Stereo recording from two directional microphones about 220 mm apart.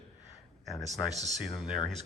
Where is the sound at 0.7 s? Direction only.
15° left (ahead or behind).